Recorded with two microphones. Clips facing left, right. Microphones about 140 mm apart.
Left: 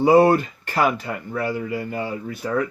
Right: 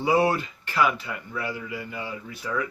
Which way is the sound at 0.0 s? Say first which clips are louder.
Left 8 dB; 50° left (ahead or behind).